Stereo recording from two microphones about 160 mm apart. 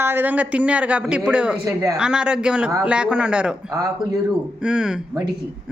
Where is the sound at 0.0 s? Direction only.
15° right (ahead or behind).